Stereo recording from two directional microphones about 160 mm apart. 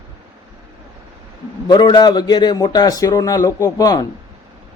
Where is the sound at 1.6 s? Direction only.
30° left (ahead or behind).